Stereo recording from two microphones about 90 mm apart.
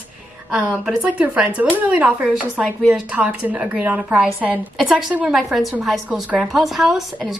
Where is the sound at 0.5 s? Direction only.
5° right (ahead or behind).